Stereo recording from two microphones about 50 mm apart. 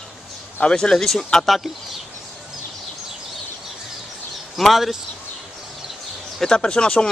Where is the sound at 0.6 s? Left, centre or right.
Centre.